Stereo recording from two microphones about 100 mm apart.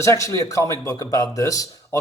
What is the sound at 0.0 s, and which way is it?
Speech, 30° left (ahead or behind).